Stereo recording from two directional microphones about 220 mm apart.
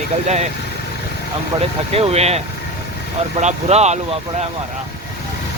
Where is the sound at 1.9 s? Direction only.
30° right (ahead or behind).